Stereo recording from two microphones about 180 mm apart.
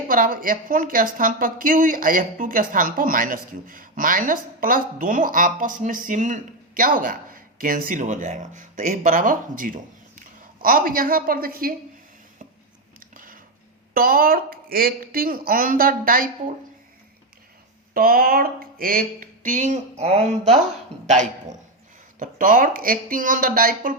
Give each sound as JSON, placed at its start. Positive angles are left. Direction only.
{"t": 0.1, "sound": "speech", "side_deg": -50}
{"t": 13.1, "sound": "a sound", "side_deg": -50}
{"t": 13.9, "sound": "speech", "side_deg": -55}
{"t": 17.9, "sound": "speech", "side_deg": -55}
{"t": 22.2, "sound": "speech", "side_deg": -45}